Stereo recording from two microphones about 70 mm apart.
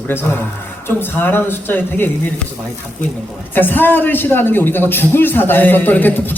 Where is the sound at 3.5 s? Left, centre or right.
Left.